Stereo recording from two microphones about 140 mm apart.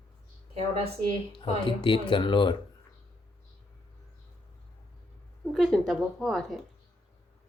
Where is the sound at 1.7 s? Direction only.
35° left (ahead or behind).